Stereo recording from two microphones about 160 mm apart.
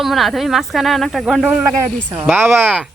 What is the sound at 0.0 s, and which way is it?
Speech, centre (ahead or behind).